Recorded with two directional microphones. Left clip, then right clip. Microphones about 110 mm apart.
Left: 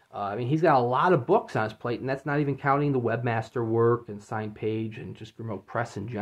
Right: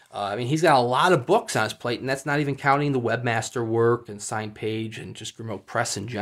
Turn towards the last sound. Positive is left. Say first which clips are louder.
# right 5 dB
turn(degrees=-25)  # may be behind; listen again after turning